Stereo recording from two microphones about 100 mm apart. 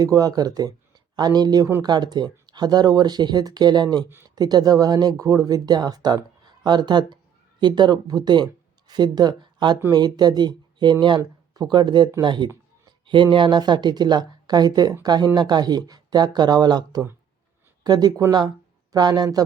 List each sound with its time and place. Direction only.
0.0 s speech: 40° right (ahead or behind)